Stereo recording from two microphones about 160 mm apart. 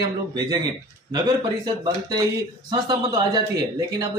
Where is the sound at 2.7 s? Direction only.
25° right (ahead or behind).